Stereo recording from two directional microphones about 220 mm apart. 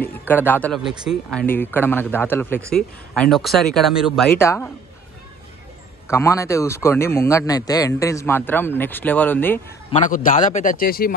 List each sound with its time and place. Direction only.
0.3 s speech: 10° left (ahead or behind)
6.0 s speech: 10° left (ahead or behind)
9.8 s a man's voice: 35° left (ahead or behind)